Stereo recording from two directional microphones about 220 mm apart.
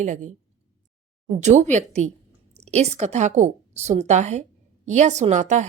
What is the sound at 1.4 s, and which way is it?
A woman's voice, 30° right (ahead or behind).